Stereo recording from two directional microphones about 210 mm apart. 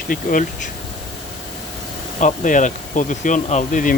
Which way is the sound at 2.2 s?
35° left (ahead or behind).